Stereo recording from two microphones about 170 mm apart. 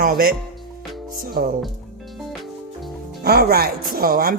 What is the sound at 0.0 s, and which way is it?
Speech, 60° right (ahead or behind).